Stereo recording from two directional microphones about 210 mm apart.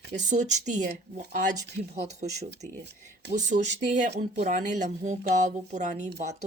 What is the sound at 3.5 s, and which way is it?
Speech, 45° right (ahead or behind).